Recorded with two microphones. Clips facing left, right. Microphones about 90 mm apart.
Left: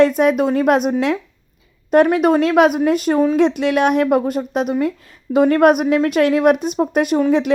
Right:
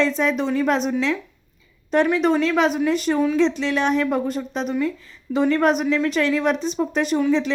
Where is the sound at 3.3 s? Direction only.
55° left (ahead or behind).